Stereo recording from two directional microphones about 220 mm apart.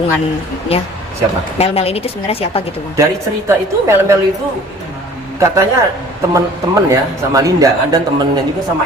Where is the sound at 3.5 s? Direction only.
10° right (ahead or behind).